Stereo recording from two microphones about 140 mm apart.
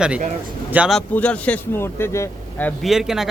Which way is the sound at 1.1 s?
10° left (ahead or behind).